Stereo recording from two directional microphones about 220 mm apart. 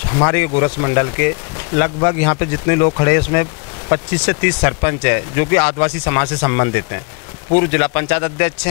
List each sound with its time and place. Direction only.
0.1 s speech: 20° left (ahead or behind)